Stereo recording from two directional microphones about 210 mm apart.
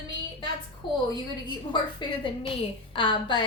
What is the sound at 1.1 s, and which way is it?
A woman's voice, 20° left (ahead or behind).